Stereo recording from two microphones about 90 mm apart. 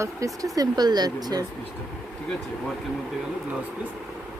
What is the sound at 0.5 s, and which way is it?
Speech, 50° right (ahead or behind).